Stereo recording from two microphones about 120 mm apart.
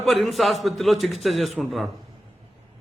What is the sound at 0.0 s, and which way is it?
A man's voice, centre (ahead or behind).